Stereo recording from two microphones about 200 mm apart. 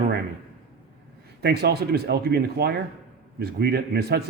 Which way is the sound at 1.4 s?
55° right (ahead or behind).